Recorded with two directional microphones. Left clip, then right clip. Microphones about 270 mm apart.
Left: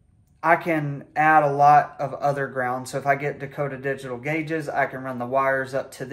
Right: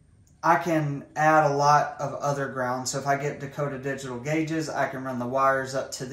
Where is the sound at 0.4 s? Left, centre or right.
Left.